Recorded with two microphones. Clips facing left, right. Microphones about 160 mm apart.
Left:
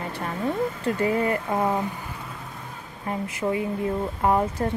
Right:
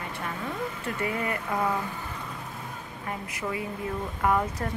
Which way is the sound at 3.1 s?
30° left (ahead or behind).